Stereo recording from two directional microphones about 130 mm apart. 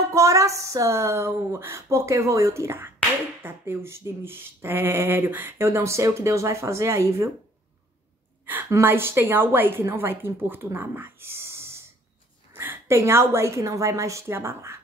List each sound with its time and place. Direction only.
0.1 s speech: 25° right (ahead or behind)
8.5 s a woman's voice: 20° right (ahead or behind)